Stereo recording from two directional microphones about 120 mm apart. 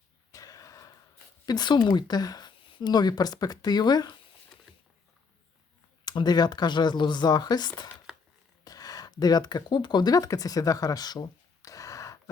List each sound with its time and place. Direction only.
0.3 s a sound: 30° left (ahead or behind)
1.5 s speech: 35° left (ahead or behind)
6.1 s speech: 35° left (ahead or behind)